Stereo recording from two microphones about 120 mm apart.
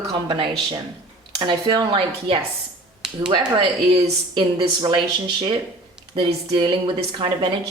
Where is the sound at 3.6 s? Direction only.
45° right (ahead or behind).